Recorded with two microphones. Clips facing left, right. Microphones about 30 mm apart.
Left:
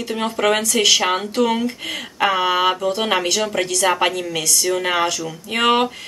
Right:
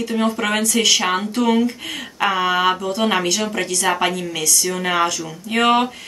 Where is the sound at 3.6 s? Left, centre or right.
Left.